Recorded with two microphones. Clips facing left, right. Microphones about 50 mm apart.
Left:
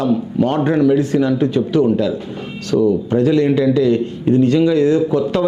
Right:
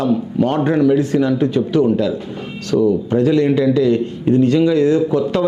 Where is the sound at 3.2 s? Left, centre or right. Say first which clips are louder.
Even; centre.